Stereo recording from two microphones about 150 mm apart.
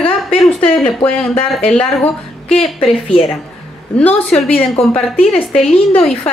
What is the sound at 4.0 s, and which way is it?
Speech, 10° left (ahead or behind).